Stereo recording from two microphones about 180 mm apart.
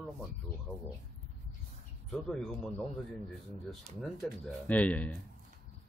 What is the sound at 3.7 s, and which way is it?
Speech, centre (ahead or behind).